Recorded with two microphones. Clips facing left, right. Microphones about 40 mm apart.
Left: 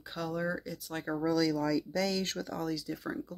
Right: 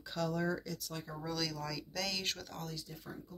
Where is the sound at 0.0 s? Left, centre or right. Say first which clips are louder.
Left 1 dB; centre.